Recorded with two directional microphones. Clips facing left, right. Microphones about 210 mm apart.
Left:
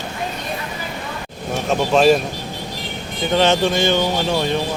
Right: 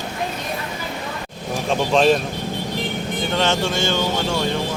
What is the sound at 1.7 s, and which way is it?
Speech, 5° left (ahead or behind).